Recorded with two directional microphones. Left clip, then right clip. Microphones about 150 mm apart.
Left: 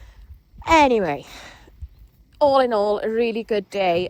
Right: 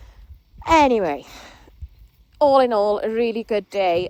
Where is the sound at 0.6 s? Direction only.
5° right (ahead or behind).